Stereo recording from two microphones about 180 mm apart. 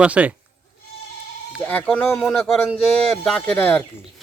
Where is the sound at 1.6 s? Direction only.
10° left (ahead or behind).